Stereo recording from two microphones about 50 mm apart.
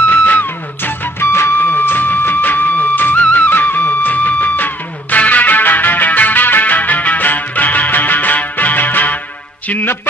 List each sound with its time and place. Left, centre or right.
0.1 s music: left
1.3 s music: left